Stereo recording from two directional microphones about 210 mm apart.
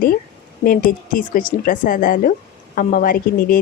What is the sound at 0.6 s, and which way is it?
A woman's voice, 40° left (ahead or behind).